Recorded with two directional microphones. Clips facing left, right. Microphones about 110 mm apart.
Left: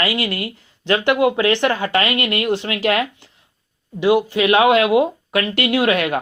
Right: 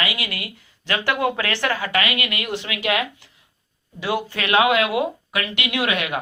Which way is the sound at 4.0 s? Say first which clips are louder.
Left 9 dB; 15° left (ahead or behind).